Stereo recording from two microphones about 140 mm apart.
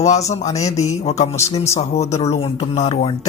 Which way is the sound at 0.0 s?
55° left (ahead or behind).